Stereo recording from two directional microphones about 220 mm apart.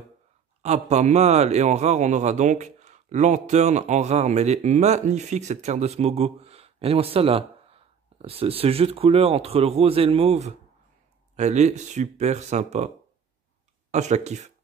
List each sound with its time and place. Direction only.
0.6 s a man's voice: 30° right (ahead or behind)
13.9 s a man's voice: 30° right (ahead or behind)